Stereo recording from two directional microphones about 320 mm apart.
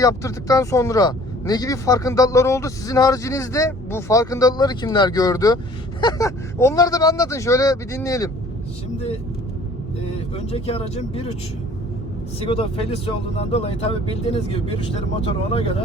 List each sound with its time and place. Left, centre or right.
0.0 s speech: centre
10.3 s speech: centre
12.4 s speech: centre